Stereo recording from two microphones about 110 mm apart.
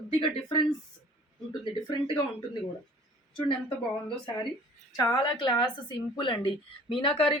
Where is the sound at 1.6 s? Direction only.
50° left (ahead or behind).